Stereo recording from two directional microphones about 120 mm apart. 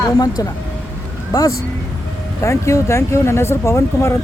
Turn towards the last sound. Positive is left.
turn(degrees=25)  # may be behind; listen again after turning